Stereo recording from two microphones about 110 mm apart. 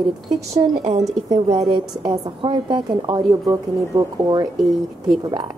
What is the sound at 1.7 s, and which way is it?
A woman's voice, 45° right (ahead or behind).